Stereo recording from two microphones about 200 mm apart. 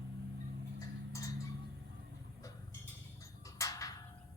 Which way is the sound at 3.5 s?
15° left (ahead or behind).